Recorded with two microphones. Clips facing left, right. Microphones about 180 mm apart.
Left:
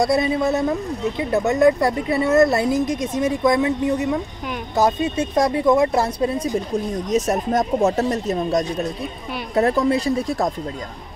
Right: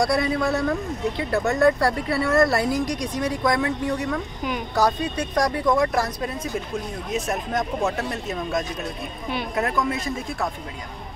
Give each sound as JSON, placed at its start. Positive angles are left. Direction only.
{"t": 0.0, "sound": "speech", "side_deg": 20}
{"t": 7.1, "sound": "speech", "side_deg": 40}